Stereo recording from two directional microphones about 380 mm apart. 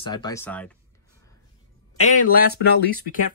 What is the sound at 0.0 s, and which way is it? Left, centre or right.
Speech, centre.